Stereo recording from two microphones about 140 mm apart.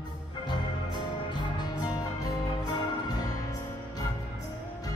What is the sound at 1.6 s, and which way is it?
Music, 30° left (ahead or behind).